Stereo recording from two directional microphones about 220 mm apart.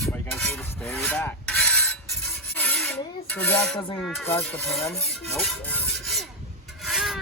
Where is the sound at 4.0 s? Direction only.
Centre (ahead or behind).